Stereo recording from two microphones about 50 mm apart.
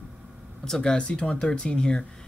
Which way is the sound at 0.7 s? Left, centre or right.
Centre.